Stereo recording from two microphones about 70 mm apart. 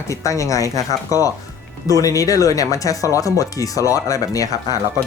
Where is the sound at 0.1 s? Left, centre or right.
Left.